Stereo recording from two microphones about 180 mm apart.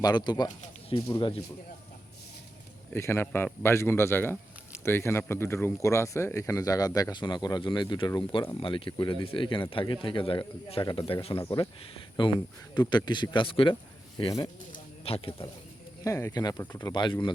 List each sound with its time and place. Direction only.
0.0 s speech: 25° left (ahead or behind)
2.9 s a man's voice: 15° left (ahead or behind); by 15.4 s 30° left (ahead or behind)
16.0 s speech: 15° left (ahead or behind)